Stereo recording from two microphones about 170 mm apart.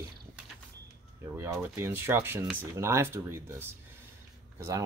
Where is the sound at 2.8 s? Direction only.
15° right (ahead or behind).